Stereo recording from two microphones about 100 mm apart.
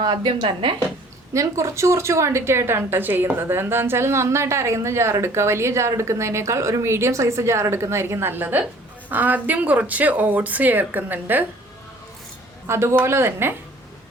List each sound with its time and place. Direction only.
0.0 s a woman's voice: 50° right (ahead or behind)
1.3 s a woman's voice: 30° right (ahead or behind)
12.6 s a woman's voice: 25° right (ahead or behind)